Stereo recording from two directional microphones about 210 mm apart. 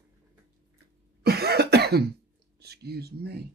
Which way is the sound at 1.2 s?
50° right (ahead or behind).